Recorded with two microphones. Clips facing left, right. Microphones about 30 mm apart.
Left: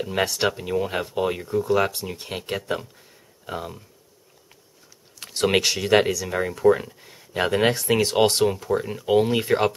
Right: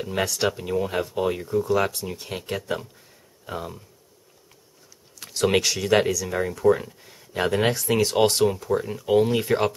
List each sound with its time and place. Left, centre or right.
0.2 s speech: left
0.6 s speech: centre
5.2 s speech: left